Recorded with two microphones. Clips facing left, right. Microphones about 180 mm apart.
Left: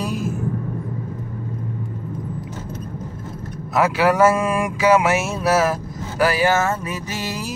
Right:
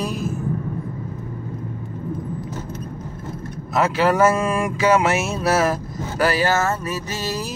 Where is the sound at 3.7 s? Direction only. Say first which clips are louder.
Left 1 dB; 10° left (ahead or behind).